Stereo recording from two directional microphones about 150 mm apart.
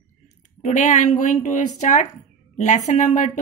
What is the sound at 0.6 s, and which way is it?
Speech, 55° left (ahead or behind).